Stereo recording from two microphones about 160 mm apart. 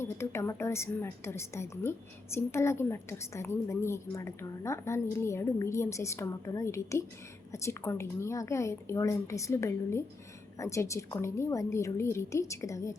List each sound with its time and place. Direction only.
0.0 s a woman's voice: 15° left (ahead or behind)